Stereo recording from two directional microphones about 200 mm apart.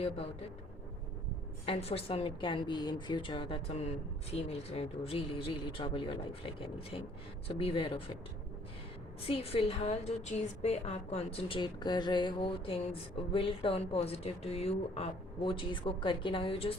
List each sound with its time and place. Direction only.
1.6 s a woman's voice: 30° left (ahead or behind)
9.2 s a woman's voice: 30° left (ahead or behind)